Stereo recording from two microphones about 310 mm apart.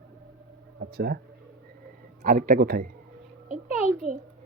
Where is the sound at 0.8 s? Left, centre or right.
Right.